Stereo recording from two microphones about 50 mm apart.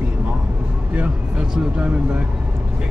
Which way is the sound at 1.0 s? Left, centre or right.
Right.